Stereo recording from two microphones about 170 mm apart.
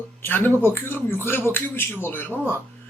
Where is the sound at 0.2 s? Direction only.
10° left (ahead or behind).